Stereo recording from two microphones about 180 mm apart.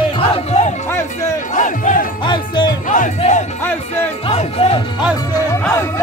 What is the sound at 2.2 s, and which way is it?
Music, 25° left (ahead or behind).